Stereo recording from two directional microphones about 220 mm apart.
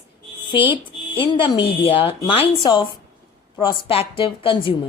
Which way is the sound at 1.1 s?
20° left (ahead or behind).